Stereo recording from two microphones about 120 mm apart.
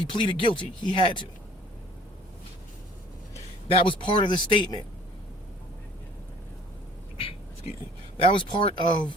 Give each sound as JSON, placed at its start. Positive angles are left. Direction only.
{"t": 0.0, "sound": "speech", "side_deg": 45}
{"t": 3.7, "sound": "speech", "side_deg": 45}
{"t": 8.2, "sound": "speech", "side_deg": 45}